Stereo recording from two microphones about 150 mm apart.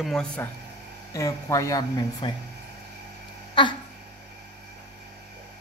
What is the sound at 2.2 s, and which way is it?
Speech, 35° left (ahead or behind).